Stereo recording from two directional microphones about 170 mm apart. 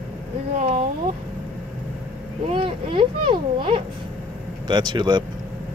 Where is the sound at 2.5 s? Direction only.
30° right (ahead or behind).